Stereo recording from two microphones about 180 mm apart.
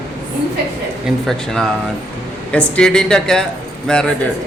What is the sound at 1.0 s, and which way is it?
Speech, centre (ahead or behind).